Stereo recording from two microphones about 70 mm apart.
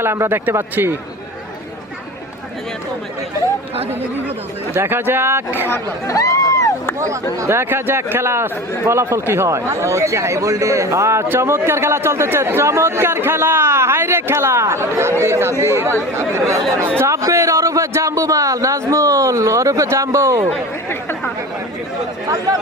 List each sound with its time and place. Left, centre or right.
0.0 s speech: right
4.7 s speech: right
6.1 s a sound: left
7.0 s a man's voice: right